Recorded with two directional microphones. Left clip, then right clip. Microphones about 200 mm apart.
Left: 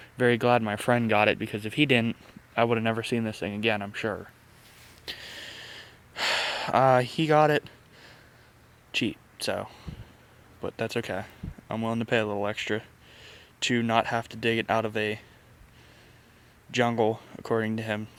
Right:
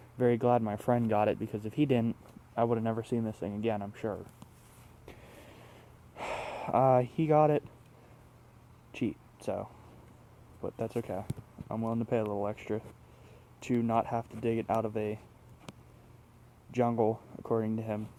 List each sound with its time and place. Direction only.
0.2 s speech: 10° left (ahead or behind)
5.0 s gasp: 5° left (ahead or behind)
8.9 s speech: 5° left (ahead or behind)
16.7 s speech: 10° left (ahead or behind)
17.3 s speech: 20° left (ahead or behind)